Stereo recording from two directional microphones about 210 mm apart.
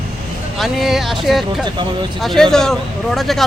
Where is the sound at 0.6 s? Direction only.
Centre (ahead or behind).